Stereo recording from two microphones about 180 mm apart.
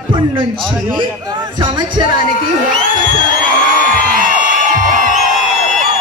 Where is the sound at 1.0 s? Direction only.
25° right (ahead or behind).